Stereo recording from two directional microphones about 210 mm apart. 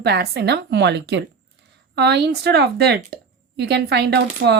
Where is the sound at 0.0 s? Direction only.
50° right (ahead or behind).